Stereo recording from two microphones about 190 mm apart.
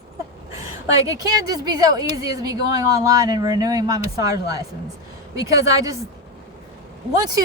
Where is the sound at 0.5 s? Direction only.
15° right (ahead or behind).